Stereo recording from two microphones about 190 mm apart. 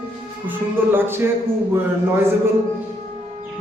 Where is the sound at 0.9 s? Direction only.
10° right (ahead or behind).